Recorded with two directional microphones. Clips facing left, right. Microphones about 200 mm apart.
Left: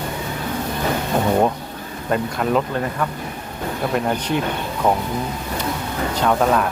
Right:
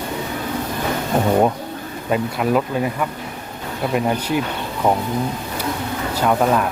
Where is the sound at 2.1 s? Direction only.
5° right (ahead or behind).